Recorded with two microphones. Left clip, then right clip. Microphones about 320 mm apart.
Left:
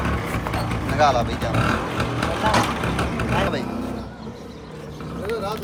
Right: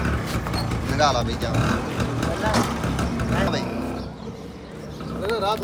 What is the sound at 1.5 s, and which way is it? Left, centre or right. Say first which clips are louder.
Vehicle: left 3 dB; centre.